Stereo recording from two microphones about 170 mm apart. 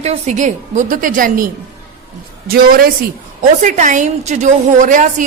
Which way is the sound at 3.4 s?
50° right (ahead or behind).